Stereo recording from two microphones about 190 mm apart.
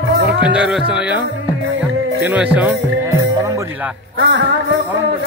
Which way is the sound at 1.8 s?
10° right (ahead or behind).